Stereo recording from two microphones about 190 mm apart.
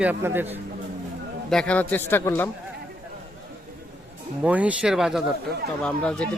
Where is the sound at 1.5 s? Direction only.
5° left (ahead or behind).